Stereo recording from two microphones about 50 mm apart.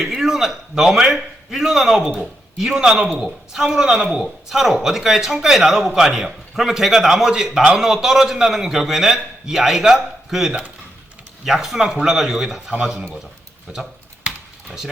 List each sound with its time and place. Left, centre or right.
0.2 s a man's voice: centre
13.7 s speech: right